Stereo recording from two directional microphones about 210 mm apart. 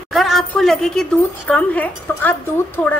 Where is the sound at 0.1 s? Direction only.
Centre (ahead or behind).